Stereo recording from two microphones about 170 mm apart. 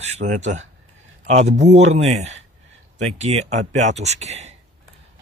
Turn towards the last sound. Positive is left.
turn(degrees=-40)  # may be behind; listen again after turning